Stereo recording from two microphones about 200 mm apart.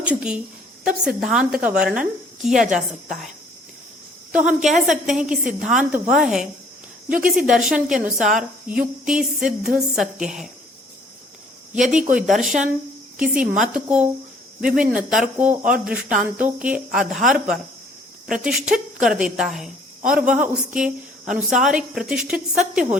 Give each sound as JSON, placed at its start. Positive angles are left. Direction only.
{"t": 0.0, "sound": "a woman's voice", "side_deg": -5}
{"t": 4.4, "sound": "a woman's voice", "side_deg": -5}
{"t": 7.3, "sound": "a woman's voice", "side_deg": -5}
{"t": 11.8, "sound": "speech", "side_deg": -40}
{"t": 12.4, "sound": "a woman's voice", "side_deg": 0}